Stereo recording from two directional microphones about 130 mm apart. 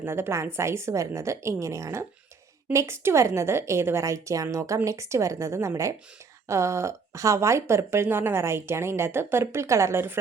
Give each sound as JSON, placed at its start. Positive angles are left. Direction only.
{"t": 0.0, "sound": "speech", "side_deg": -20}